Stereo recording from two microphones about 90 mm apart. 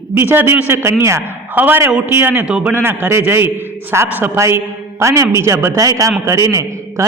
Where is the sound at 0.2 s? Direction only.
25° right (ahead or behind).